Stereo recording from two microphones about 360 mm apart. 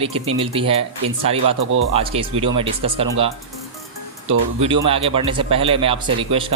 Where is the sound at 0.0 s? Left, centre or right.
Centre.